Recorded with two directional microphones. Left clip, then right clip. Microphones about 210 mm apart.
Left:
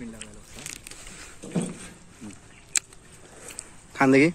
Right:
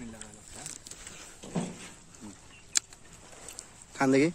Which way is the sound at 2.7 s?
10° right (ahead or behind).